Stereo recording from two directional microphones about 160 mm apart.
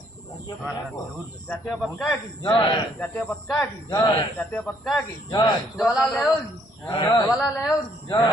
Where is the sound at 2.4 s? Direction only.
30° left (ahead or behind).